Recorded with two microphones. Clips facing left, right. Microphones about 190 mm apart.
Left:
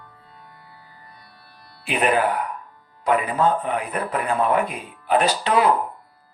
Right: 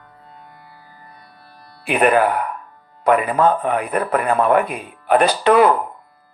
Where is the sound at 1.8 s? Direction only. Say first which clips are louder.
Right 5 dB; 55° right (ahead or behind).